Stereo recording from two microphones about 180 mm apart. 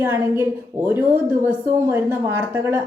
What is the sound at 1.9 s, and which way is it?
Speech, 15° right (ahead or behind).